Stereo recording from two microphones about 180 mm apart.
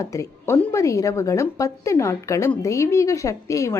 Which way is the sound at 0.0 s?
15° left (ahead or behind).